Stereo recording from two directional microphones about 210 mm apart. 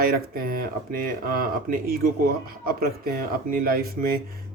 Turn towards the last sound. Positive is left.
turn(degrees=-45)  # may be behind; listen again after turning